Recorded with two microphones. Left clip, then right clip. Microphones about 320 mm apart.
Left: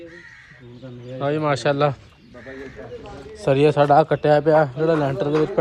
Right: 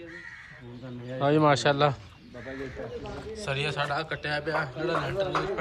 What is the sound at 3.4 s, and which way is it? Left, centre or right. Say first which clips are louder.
A man's voice: left 14 dB; centre.